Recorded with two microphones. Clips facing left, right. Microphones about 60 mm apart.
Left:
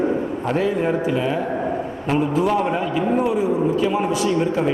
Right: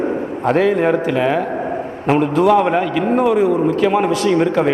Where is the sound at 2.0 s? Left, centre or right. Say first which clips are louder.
Right 6 dB; right.